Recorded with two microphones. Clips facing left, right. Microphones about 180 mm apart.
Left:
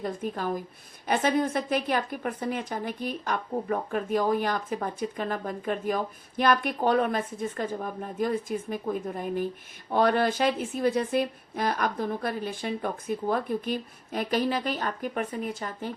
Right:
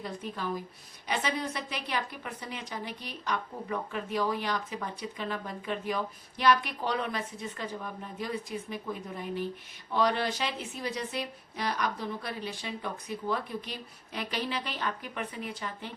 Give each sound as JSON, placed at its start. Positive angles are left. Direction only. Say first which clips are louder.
{"t": 0.0, "sound": "a woman's voice", "louder": "left 6 dB", "side_deg": 50}